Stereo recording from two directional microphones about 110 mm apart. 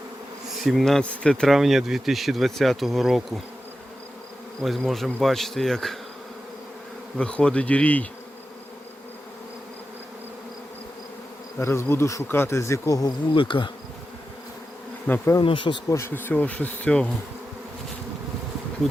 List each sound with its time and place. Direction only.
0.6 s speech: centre (ahead or behind)
4.6 s speech: centre (ahead or behind)
7.2 s speech: 10° left (ahead or behind)
11.6 s speech: 25° left (ahead or behind)
13.3 s speech: 50° left (ahead or behind)
15.4 s speech: 50° left (ahead or behind)
15.9 s speech: 25° left (ahead or behind)